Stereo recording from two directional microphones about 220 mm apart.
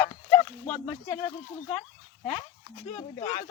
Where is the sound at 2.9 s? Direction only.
15° left (ahead or behind).